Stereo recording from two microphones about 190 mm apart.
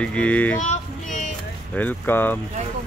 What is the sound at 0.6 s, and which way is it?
Music, 40° left (ahead or behind).